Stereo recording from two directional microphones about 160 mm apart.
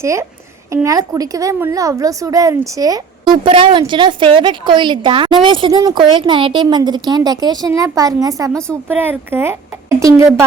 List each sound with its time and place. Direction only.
0.0 s a woman's voice: 15° right (ahead or behind)